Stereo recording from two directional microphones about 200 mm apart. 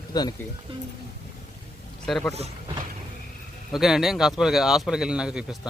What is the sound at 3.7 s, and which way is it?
Speech, centre (ahead or behind).